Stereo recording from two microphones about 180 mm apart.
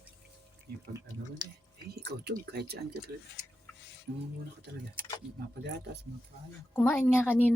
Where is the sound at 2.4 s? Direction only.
65° right (ahead or behind).